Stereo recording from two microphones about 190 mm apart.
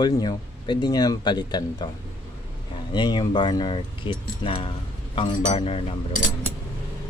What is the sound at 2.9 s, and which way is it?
Speech, 25° left (ahead or behind).